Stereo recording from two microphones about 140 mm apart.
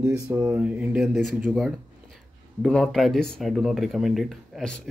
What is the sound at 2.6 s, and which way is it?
Speech, 5° left (ahead or behind).